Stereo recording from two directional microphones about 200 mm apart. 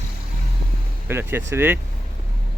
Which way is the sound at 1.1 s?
10° right (ahead or behind).